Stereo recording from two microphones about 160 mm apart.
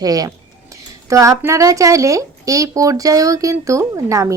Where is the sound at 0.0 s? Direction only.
20° right (ahead or behind).